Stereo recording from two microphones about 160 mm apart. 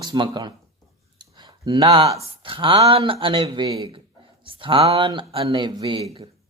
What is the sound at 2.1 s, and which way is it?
Speech, 35° right (ahead or behind).